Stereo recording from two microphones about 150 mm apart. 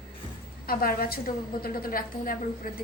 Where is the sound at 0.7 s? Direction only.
75° left (ahead or behind).